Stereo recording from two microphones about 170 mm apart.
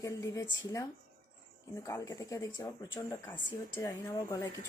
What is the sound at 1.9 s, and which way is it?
Speech, 20° left (ahead or behind).